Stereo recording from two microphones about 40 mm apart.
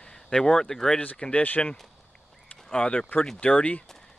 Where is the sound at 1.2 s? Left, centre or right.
Left.